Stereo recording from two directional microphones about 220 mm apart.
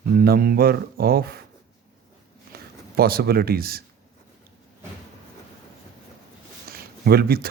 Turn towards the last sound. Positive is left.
turn(degrees=-45)  # may be behind; listen again after turning